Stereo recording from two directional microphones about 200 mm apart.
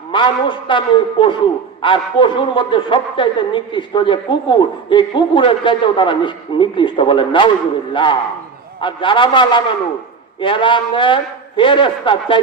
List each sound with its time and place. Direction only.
0.1 s a woman's voice: 25° left (ahead or behind)